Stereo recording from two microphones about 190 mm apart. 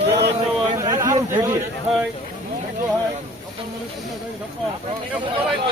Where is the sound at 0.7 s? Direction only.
15° right (ahead or behind).